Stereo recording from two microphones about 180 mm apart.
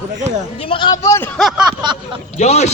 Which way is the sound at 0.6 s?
30° left (ahead or behind).